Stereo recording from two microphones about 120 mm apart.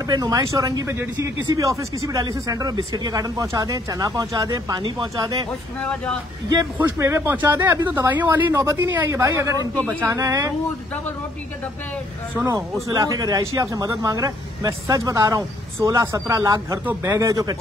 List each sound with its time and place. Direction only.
0.0 s a man's voice: 30° right (ahead or behind)
5.8 s speech: 10° left (ahead or behind)
6.8 s a man's voice: 20° right (ahead or behind)
12.4 s a man's voice: 25° right (ahead or behind)